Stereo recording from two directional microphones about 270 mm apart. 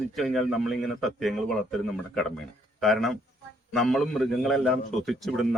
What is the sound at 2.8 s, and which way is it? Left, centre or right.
A man's voice, centre.